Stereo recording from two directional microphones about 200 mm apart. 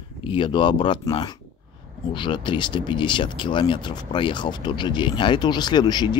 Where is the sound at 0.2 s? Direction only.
25° left (ahead or behind).